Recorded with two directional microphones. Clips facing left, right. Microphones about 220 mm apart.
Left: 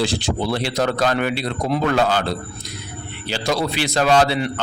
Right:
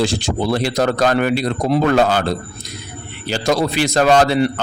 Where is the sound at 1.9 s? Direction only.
50° right (ahead or behind).